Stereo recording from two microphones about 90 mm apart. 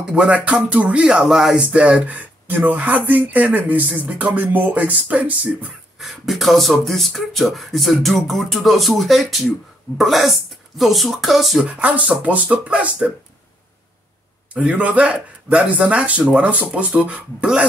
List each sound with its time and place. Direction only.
0.0 s speech: 10° right (ahead or behind)
5.9 s speech: centre (ahead or behind)
11.8 s speech: 15° right (ahead or behind)
14.5 s speech: 15° right (ahead or behind)